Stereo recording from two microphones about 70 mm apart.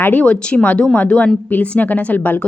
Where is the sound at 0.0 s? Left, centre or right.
Left.